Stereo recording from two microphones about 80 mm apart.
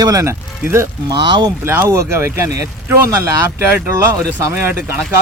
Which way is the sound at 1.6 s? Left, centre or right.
Right.